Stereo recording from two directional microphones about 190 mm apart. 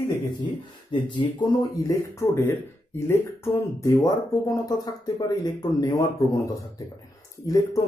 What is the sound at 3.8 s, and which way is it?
Speech, 20° left (ahead or behind).